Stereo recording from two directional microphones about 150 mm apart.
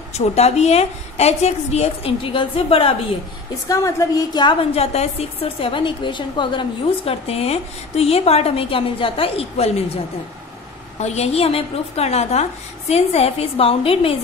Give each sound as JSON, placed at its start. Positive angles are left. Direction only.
{"t": 0.2, "sound": "a woman's voice", "side_deg": 45}
{"t": 3.6, "sound": "a woman's voice", "side_deg": 20}
{"t": 7.1, "sound": "a woman's voice", "side_deg": 40}
{"t": 11.0, "sound": "a woman's voice", "side_deg": 45}